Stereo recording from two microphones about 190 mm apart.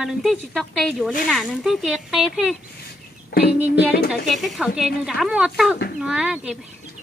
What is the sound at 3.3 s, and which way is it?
Child singing, 60° left (ahead or behind).